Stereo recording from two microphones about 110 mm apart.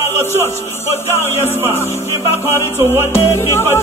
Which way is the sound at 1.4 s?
20° right (ahead or behind).